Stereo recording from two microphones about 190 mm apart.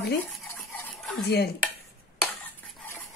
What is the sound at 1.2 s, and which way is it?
Speech, 60° left (ahead or behind).